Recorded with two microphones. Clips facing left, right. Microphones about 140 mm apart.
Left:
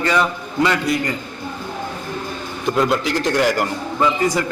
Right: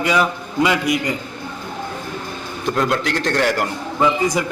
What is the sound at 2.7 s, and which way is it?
A man's voice, centre (ahead or behind).